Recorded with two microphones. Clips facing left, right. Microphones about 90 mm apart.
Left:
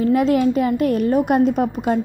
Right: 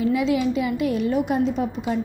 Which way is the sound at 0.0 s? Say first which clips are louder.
Left 5 dB; 50° left (ahead or behind).